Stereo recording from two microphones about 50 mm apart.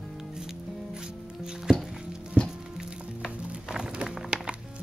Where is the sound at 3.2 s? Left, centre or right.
Centre.